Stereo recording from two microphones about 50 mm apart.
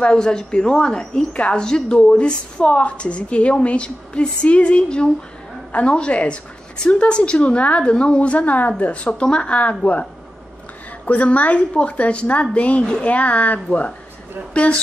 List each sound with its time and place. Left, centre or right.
0.0 s speech: centre
11.1 s speech: left